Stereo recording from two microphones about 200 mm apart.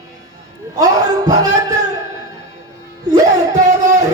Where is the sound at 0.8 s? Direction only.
20° right (ahead or behind).